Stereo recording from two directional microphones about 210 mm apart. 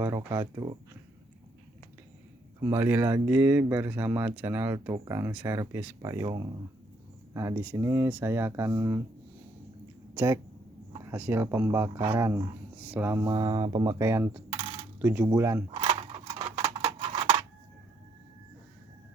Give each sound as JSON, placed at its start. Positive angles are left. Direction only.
{"t": 0.0, "sound": "speech", "side_deg": -15}
{"t": 2.6, "sound": "speech", "side_deg": -15}
{"t": 10.2, "sound": "speech", "side_deg": -10}
{"t": 14.5, "sound": "coin", "side_deg": -25}
{"t": 14.9, "sound": "speech", "side_deg": -10}
{"t": 15.7, "sound": "a sound", "side_deg": -25}